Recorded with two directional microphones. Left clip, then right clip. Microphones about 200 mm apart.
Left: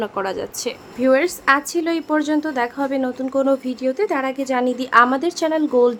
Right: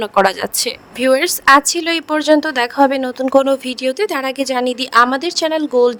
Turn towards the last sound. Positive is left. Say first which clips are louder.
# right 3 dB
turn(degrees=-35)  # may be behind; listen again after turning